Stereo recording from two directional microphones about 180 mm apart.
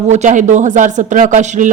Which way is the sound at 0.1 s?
40° right (ahead or behind).